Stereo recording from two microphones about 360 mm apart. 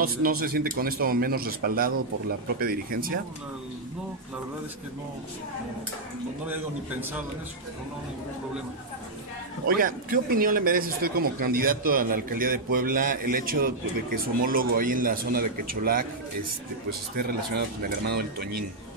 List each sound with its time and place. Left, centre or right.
0.0 s a man's voice: right
6.4 s a man's voice: centre
9.7 s a man's voice: right
17.6 s a man's voice: right